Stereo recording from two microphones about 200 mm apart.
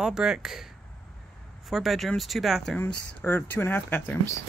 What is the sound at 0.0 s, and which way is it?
Speech, 5° right (ahead or behind).